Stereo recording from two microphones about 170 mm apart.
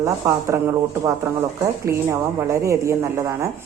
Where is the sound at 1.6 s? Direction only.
15° right (ahead or behind).